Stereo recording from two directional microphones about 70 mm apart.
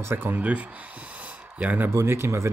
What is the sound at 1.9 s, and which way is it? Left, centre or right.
Speech, right.